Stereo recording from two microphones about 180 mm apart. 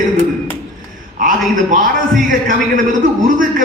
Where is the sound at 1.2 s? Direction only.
45° right (ahead or behind).